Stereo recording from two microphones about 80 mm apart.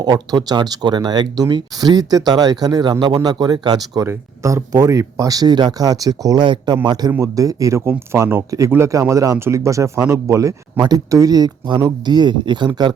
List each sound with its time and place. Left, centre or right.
0.0 s speech: right
4.0 s speech: right
6.8 s speech: right
7.2 s speech: right
7.9 s speech: right
8.4 s speech: right